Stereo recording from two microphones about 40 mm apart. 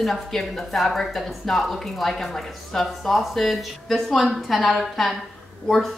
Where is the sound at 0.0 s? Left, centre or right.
Centre.